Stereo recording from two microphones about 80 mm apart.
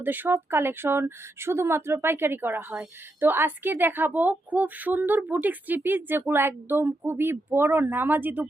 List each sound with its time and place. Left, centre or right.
0.0 s a woman's voice: right